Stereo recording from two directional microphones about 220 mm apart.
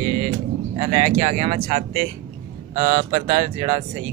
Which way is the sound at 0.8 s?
30° right (ahead or behind).